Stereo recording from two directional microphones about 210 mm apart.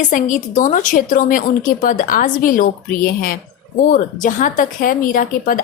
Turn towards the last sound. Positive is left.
turn(degrees=40)  # may be behind; listen again after turning